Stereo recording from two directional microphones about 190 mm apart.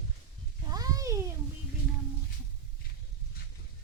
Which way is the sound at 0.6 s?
20° right (ahead or behind).